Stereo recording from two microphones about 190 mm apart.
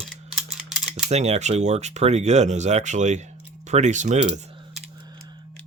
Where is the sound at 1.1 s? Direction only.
35° right (ahead or behind).